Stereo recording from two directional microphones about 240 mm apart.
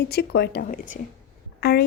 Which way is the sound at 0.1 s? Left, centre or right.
Left.